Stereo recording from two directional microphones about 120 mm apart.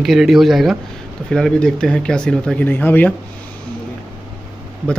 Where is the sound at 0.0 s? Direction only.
Centre (ahead or behind); by 3.2 s 15° left (ahead or behind).